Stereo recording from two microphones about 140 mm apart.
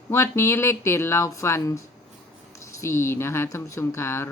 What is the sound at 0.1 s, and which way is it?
Speech, 20° left (ahead or behind).